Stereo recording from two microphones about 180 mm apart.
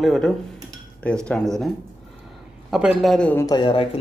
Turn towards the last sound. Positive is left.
turn(degrees=25)  # may be behind; listen again after turning